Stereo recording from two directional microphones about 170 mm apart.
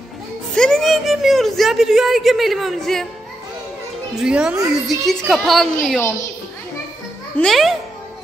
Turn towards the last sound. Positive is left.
turn(degrees=0)  # may be behind; listen again after turning